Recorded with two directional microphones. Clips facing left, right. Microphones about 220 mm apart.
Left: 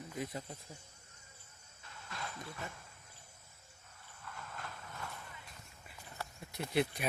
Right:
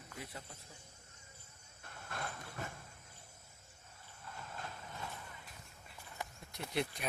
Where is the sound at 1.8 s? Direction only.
55° right (ahead or behind).